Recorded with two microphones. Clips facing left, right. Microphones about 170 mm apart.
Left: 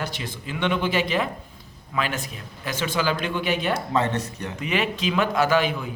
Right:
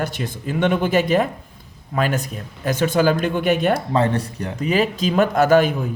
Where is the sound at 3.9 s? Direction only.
35° right (ahead or behind).